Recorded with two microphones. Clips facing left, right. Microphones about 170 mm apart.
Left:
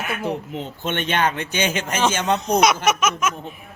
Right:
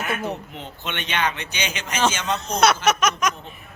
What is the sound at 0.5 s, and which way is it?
A man's voice, 45° left (ahead or behind).